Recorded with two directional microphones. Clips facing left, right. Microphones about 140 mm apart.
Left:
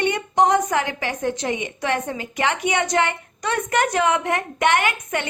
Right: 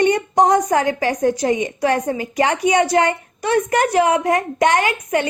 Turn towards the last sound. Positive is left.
turn(degrees=-30)  # may be behind; listen again after turning